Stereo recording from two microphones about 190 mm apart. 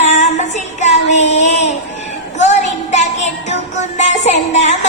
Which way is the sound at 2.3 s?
35° left (ahead or behind).